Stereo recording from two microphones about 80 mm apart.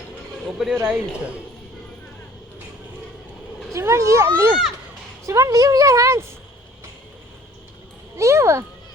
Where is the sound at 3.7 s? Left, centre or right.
Right.